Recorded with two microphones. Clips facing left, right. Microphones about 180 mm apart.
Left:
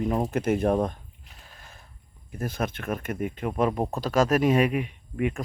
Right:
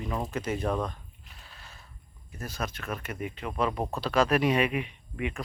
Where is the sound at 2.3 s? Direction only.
55° left (ahead or behind).